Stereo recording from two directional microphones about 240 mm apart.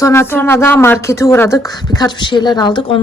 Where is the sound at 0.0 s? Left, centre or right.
Centre.